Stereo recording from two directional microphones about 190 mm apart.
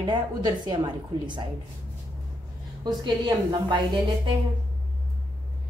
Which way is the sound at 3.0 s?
25° right (ahead or behind).